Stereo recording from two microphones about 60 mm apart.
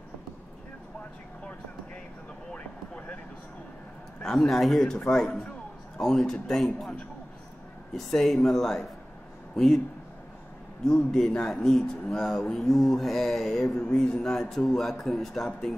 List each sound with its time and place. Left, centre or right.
2.5 s a sound: centre
4.2 s speech: centre
10.8 s speech: centre